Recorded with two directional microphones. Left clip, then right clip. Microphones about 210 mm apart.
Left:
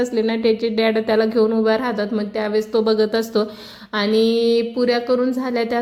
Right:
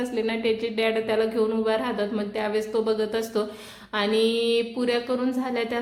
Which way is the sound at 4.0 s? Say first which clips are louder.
Left 5 dB; 30° left (ahead or behind).